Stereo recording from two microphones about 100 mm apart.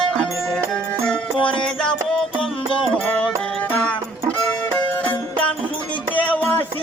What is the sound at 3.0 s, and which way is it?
Music, 15° left (ahead or behind).